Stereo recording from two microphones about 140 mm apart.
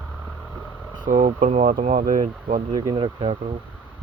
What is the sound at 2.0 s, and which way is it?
Speech, 75° right (ahead or behind).